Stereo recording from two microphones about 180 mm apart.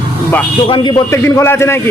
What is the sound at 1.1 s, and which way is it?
Speech, 15° left (ahead or behind).